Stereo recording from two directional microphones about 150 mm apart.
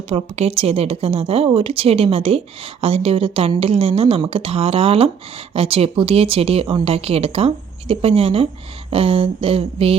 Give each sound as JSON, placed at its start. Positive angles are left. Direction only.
{"t": 0.1, "sound": "a woman's voice", "side_deg": -40}